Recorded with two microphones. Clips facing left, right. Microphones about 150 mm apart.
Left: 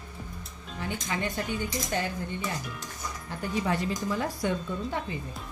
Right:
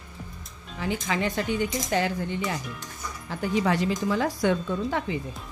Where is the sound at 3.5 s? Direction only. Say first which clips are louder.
Right 4 dB; 90° right.